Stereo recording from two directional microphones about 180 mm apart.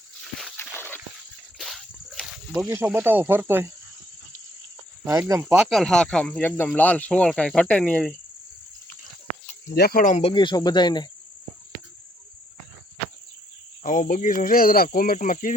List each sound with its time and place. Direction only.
0.5 s a sound: 10° left (ahead or behind)
1.5 s snake: centre (ahead or behind)
2.6 s speech: 15° right (ahead or behind)
5.2 s speech: 10° right (ahead or behind); by 8.1 s 5° left (ahead or behind)
9.6 s speech: 65° left (ahead or behind); by 11.1 s 25° left (ahead or behind)
13.8 s speech: 45° left (ahead or behind)